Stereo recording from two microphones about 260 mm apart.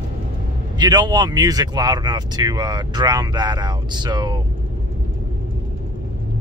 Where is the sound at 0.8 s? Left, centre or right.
Centre.